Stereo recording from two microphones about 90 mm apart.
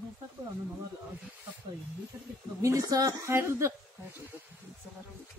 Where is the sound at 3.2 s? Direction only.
30° right (ahead or behind).